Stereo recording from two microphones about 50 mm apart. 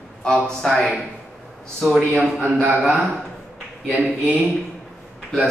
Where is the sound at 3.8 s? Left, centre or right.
Left.